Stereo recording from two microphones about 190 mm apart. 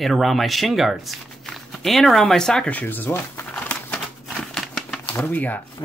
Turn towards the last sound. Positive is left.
turn(degrees=10)  # may be behind; listen again after turning